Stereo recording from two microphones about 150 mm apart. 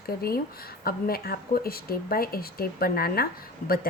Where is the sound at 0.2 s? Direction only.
90° left.